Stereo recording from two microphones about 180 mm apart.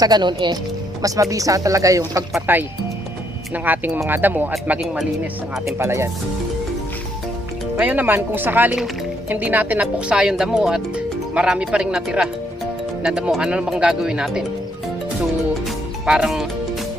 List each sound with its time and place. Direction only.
0.0 s speech: 25° right (ahead or behind)
7.8 s speech: 10° right (ahead or behind)
16.0 s speech: 5° right (ahead or behind)